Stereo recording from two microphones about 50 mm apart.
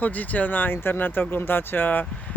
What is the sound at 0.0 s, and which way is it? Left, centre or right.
Speech, left.